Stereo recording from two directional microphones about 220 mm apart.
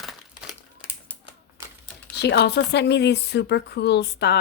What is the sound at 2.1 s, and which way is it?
Speech, 50° left (ahead or behind).